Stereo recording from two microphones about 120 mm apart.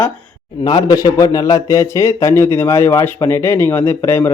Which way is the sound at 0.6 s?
35° left (ahead or behind).